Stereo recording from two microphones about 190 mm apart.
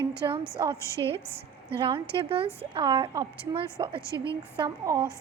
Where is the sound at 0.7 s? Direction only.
15° left (ahead or behind).